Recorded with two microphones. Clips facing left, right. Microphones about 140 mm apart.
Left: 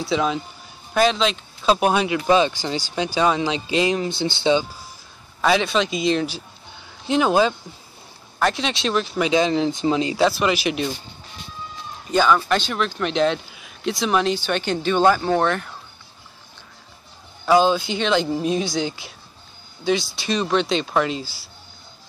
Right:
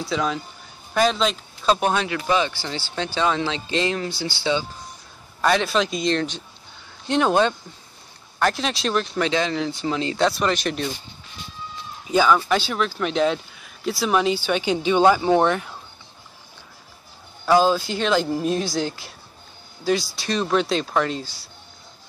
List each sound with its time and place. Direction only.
0.0 s speech: 5° left (ahead or behind)
1.8 s speech: 10° left (ahead or behind)
5.4 s speech: centre (ahead or behind)
9.3 s speech: 20° left (ahead or behind)
10.1 s speech: 5° left (ahead or behind)
12.1 s speech: 5° right (ahead or behind)
17.5 s speech: centre (ahead or behind)